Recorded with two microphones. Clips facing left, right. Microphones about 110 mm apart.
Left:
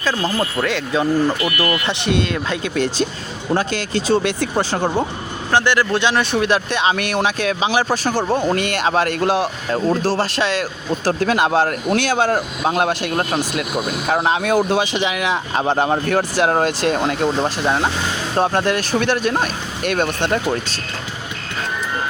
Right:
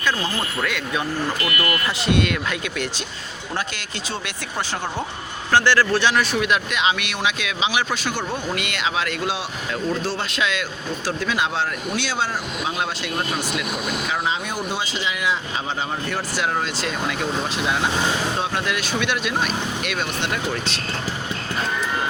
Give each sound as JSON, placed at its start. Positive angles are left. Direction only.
{"t": 0.6, "sound": "speech", "side_deg": 30}
{"t": 5.5, "sound": "speech", "side_deg": 20}
{"t": 14.1, "sound": "speech", "side_deg": 70}